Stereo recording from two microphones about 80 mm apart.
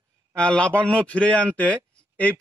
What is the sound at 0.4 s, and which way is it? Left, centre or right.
A man's voice, centre.